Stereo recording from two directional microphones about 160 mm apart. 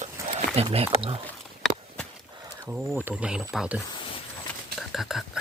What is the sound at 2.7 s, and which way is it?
Speech, 10° right (ahead or behind).